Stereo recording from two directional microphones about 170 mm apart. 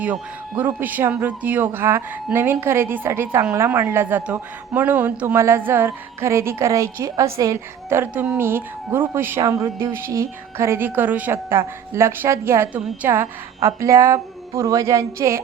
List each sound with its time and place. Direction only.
0.0 s speech: 10° right (ahead or behind)